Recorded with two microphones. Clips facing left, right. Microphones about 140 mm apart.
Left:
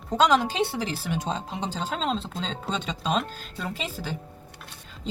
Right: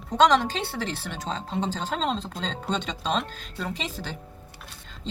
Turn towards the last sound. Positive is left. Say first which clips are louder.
# even
turn(degrees=5)  # may be behind; listen again after turning